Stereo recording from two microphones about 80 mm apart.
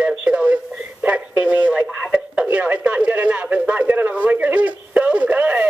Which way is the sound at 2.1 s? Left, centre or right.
Centre.